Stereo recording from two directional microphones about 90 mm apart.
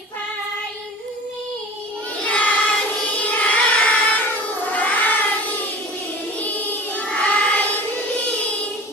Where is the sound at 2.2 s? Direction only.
15° left (ahead or behind).